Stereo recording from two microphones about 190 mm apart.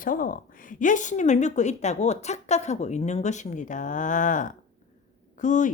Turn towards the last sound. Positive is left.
turn(degrees=40)  # may be behind; listen again after turning